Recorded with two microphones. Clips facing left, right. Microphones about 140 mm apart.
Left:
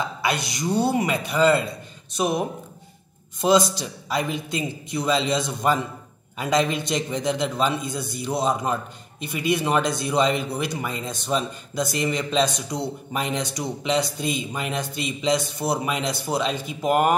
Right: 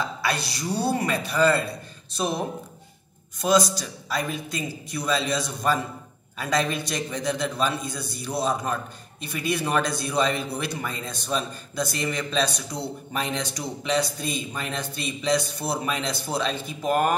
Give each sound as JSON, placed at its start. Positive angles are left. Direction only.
{"t": 0.0, "sound": "a man's voice", "side_deg": 20}